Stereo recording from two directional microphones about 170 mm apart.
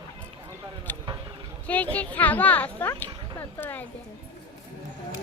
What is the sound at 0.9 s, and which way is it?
Vehicle, 10° left (ahead or behind).